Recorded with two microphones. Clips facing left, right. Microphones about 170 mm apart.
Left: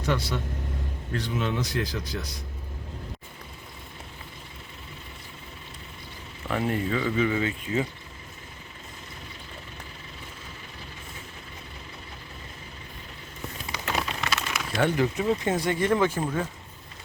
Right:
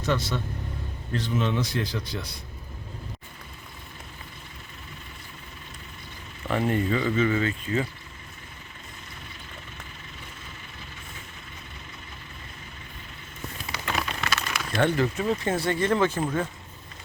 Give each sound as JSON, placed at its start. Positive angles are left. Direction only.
{"t": 0.0, "sound": "speech", "side_deg": 10}
{"t": 6.5, "sound": "speech", "side_deg": 0}
{"t": 13.7, "sound": "a sound", "side_deg": 20}
{"t": 14.8, "sound": "speech", "side_deg": 10}